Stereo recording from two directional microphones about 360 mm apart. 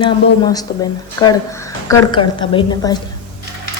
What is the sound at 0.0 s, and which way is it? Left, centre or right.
A woman's voice, centre.